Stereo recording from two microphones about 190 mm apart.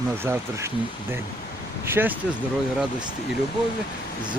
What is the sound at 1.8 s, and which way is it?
Speech, 10° right (ahead or behind).